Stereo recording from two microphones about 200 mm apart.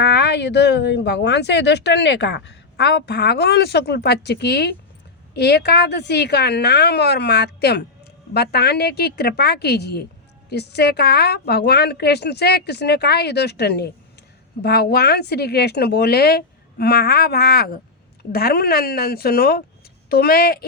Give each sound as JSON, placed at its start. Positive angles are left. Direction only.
{"t": 0.0, "sound": "speech", "side_deg": 60}